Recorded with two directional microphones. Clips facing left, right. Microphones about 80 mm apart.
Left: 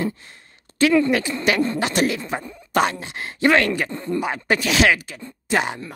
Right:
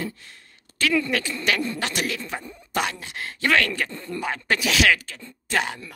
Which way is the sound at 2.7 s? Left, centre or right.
Left.